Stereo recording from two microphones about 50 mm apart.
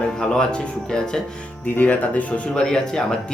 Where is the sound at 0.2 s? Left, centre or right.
Centre.